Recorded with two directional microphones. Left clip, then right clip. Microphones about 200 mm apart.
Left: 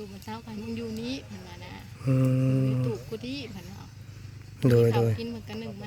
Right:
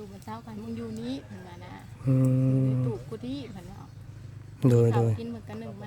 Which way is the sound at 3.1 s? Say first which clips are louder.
Left 1 dB; 20° right (ahead or behind).